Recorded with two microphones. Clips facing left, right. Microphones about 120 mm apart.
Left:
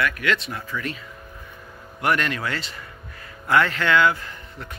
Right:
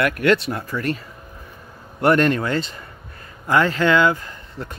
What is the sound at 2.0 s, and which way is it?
Speech, 40° right (ahead or behind).